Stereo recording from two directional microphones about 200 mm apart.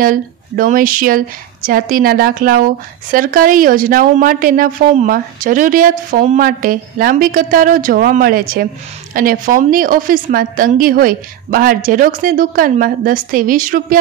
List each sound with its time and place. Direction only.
0.0 s speech: 45° right (ahead or behind)